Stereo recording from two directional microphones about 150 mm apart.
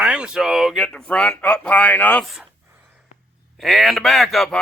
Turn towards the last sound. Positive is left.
turn(degrees=0)  # may be behind; listen again after turning